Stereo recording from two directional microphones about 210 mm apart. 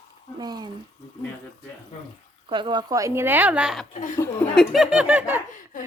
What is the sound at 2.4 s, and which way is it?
Speech, 25° right (ahead or behind).